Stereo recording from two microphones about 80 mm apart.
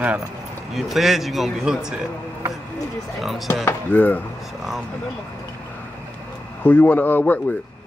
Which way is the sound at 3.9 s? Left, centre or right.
Left.